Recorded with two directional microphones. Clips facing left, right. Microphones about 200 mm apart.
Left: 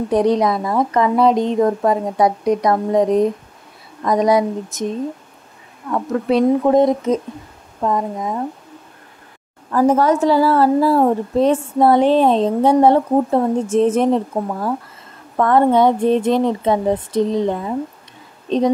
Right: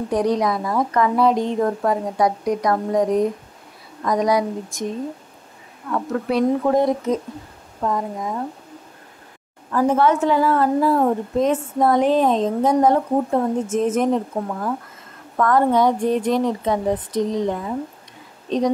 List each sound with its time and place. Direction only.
0.1 s a woman's voice: 25° left (ahead or behind)
5.9 s a woman's voice: 25° left (ahead or behind)
9.7 s a woman's voice: 40° left (ahead or behind); by 18.6 s 25° left (ahead or behind)